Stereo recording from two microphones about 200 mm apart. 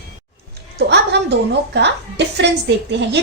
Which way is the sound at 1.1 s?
55° right (ahead or behind).